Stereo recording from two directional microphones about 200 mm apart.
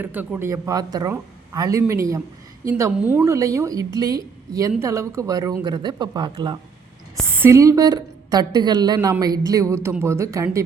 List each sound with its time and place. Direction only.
0.0 s a woman's voice: 10° right (ahead or behind)
7.3 s a woman's voice: 10° right (ahead or behind)